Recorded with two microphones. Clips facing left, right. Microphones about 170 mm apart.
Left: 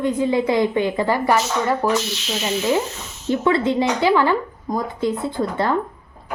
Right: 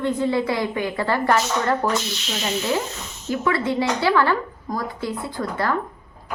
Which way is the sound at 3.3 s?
25° left (ahead or behind).